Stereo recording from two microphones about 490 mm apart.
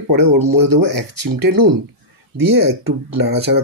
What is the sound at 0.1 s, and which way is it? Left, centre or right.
Speech, right.